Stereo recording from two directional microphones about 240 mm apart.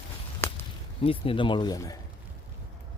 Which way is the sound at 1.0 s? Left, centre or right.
Left.